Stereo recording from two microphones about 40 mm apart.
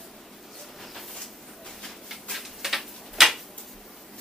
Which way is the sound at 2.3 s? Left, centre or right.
Centre.